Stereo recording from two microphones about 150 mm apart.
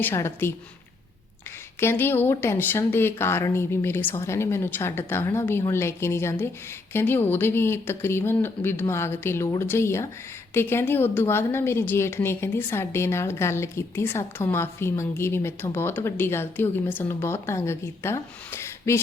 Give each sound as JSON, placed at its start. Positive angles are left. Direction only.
{"t": 0.0, "sound": "a woman's voice", "side_deg": 20}
{"t": 1.8, "sound": "a woman's voice", "side_deg": 15}